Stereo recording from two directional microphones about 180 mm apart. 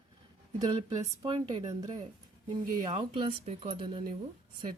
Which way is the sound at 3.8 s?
25° right (ahead or behind).